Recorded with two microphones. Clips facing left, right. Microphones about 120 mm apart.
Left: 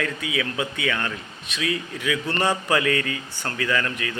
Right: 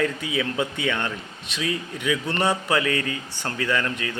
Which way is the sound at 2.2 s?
15° right (ahead or behind).